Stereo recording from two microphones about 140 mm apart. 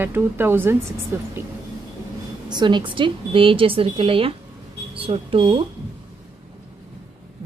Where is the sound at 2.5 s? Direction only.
35° right (ahead or behind).